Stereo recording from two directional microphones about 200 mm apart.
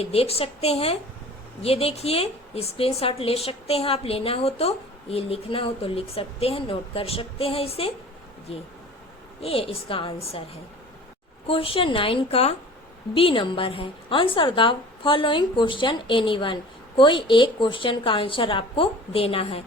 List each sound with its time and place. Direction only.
0.0 s a woman's voice: 30° left (ahead or behind)
9.4 s a woman's voice: 30° left (ahead or behind)
11.4 s a woman's voice: 25° left (ahead or behind)